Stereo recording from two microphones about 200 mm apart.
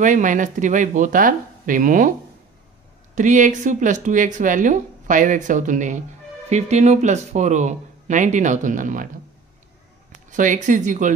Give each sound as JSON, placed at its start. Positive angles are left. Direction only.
{"t": 0.0, "sound": "speech", "side_deg": -40}
{"t": 3.2, "sound": "speech", "side_deg": -40}
{"t": 10.1, "sound": "speech", "side_deg": -40}